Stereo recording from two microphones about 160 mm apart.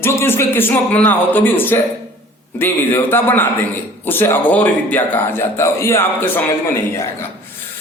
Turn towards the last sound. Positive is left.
turn(degrees=20)  # may be behind; listen again after turning